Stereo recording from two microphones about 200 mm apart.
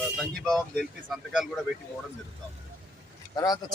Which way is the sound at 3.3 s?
20° left (ahead or behind).